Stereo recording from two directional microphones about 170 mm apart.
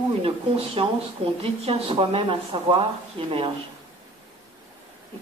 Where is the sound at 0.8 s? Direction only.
35° right (ahead or behind).